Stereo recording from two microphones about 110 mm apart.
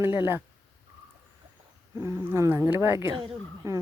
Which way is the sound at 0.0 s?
20° right (ahead or behind).